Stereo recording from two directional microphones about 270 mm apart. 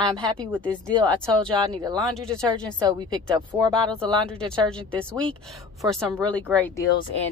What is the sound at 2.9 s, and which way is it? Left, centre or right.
Speech, centre.